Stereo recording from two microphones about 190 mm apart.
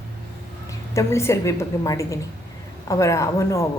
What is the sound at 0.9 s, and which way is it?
A woman's voice, 15° left (ahead or behind).